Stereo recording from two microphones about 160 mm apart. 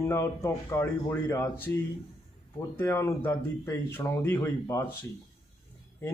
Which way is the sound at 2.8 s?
15° left (ahead or behind).